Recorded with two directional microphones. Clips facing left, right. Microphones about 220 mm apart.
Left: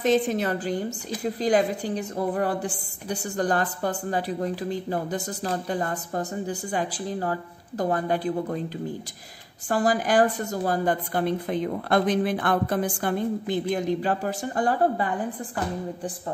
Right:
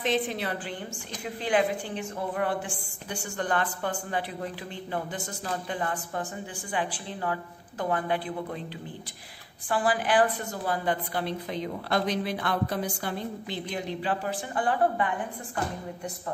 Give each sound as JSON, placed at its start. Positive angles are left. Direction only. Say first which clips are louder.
{"t": 0.0, "sound": "a woman's voice", "louder": "left 6 dB", "side_deg": 45}
{"t": 9.7, "sound": "a woman's voice", "louder": "left 3 dB", "side_deg": 40}